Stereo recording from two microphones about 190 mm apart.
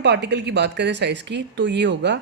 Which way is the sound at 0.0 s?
65° right (ahead or behind).